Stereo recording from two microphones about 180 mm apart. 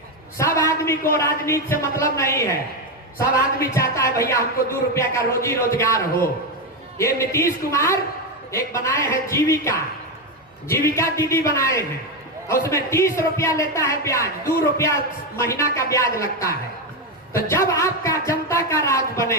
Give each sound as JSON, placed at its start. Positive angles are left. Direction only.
{"t": 0.3, "sound": "a sound", "side_deg": 15}
{"t": 1.1, "sound": "speech", "side_deg": 15}
{"t": 3.8, "sound": "speech", "side_deg": 15}